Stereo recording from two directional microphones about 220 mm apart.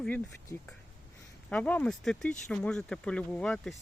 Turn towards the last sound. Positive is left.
turn(degrees=5)  # may be behind; listen again after turning